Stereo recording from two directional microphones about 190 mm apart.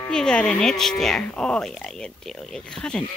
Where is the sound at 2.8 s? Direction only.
5° left (ahead or behind).